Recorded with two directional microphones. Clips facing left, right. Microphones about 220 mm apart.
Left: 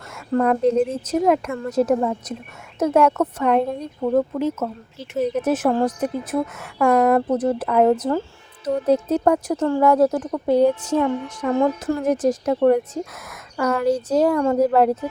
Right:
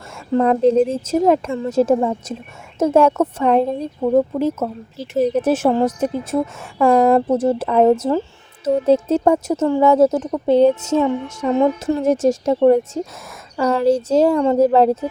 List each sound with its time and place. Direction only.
0.3 s speech: 25° right (ahead or behind)